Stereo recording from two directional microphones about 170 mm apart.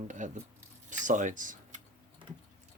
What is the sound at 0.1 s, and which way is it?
Speech, 45° right (ahead or behind).